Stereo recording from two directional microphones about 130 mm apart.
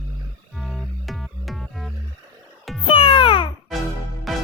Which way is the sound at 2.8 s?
45° left (ahead or behind).